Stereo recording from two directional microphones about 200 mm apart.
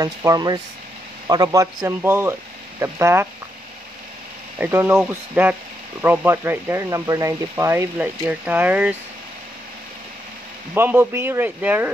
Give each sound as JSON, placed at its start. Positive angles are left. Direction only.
{"t": 0.0, "sound": "a man's voice", "side_deg": -15}
{"t": 4.6, "sound": "speech", "side_deg": -10}
{"t": 10.7, "sound": "speech", "side_deg": -10}